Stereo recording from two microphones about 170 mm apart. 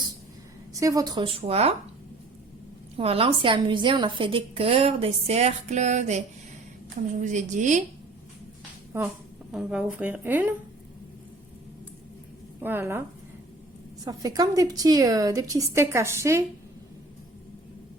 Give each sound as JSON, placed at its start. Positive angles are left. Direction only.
{"t": 0.7, "sound": "a woman's voice", "side_deg": -20}
{"t": 3.0, "sound": "a woman's voice", "side_deg": -35}
{"t": 8.9, "sound": "speech", "side_deg": -15}
{"t": 12.5, "sound": "a woman's voice", "side_deg": -15}
{"t": 14.0, "sound": "a woman's voice", "side_deg": -20}